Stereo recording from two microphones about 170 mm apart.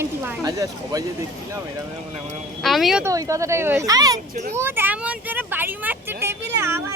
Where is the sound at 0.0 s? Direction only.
10° right (ahead or behind).